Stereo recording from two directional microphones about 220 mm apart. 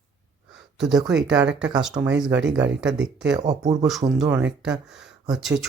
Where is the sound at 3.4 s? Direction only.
15° right (ahead or behind); by 5.7 s centre (ahead or behind).